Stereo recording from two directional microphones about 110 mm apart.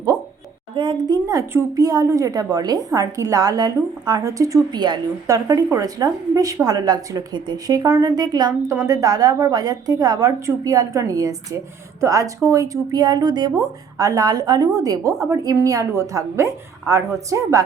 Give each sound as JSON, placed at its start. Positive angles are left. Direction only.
{"t": 0.8, "sound": "a woman's voice", "side_deg": -45}
{"t": 5.2, "sound": "a woman's voice", "side_deg": -30}